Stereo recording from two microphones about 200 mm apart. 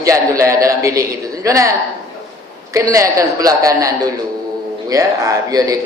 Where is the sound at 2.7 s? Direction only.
15° right (ahead or behind).